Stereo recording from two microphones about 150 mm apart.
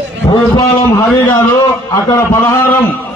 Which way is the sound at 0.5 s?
20° left (ahead or behind).